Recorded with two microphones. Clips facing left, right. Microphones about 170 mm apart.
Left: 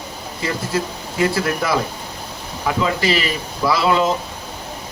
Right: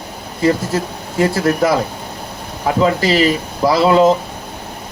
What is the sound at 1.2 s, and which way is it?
Speech, 45° right (ahead or behind).